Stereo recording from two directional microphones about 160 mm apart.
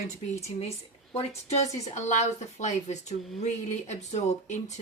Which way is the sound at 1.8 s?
45° left (ahead or behind).